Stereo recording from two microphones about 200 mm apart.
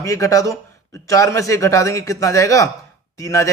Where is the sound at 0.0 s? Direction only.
15° left (ahead or behind).